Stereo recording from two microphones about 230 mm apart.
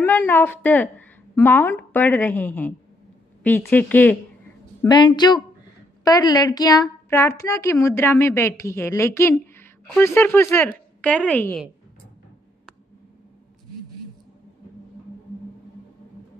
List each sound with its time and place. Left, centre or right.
0.0 s a woman's voice: centre
4.8 s a woman's voice: centre